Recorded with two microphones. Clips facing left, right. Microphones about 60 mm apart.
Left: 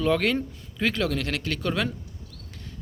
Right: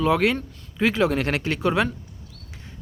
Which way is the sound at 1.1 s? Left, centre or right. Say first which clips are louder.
Right 5 dB; right.